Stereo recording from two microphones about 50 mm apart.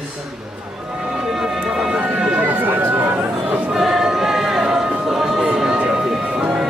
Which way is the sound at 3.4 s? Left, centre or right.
Right.